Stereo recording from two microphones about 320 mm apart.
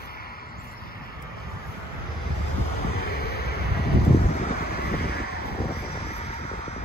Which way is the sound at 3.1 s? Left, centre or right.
Left.